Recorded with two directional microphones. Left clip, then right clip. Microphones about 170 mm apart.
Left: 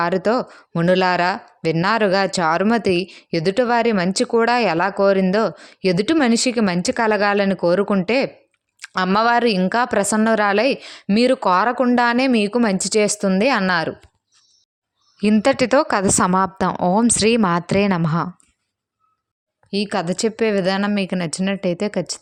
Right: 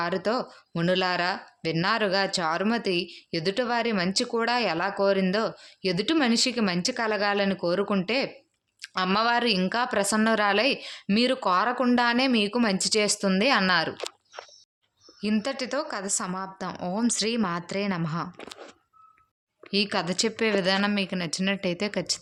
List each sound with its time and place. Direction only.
0.0 s speech: 45° left (ahead or behind)
8.8 s a sound: 50° left (ahead or behind)
9.0 s speech: 45° left (ahead or behind)
15.2 s speech: 50° left (ahead or behind)
16.7 s speech: 40° left (ahead or behind)
19.7 s speech: 40° left (ahead or behind)